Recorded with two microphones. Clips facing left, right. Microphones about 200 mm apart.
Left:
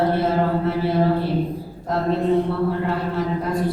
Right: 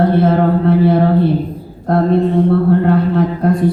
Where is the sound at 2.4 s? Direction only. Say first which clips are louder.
Right 10 dB; 55° right (ahead or behind).